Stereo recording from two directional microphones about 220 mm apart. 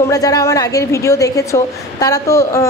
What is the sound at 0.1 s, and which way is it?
A woman's voice, 15° left (ahead or behind).